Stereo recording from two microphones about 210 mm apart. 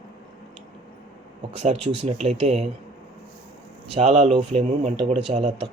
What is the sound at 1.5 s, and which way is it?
Speech, 30° right (ahead or behind).